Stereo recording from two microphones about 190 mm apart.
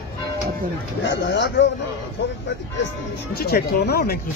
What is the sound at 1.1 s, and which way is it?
Speech, 65° left (ahead or behind).